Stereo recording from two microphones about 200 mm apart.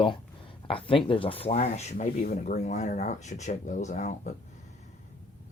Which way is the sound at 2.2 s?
45° left (ahead or behind).